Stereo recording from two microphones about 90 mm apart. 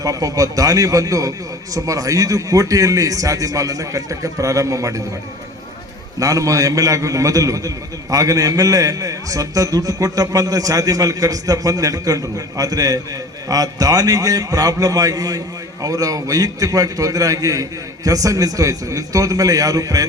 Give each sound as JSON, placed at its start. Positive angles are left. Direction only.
{"t": 0.0, "sound": "a man's voice", "side_deg": -40}
{"t": 6.1, "sound": "a man's voice", "side_deg": -40}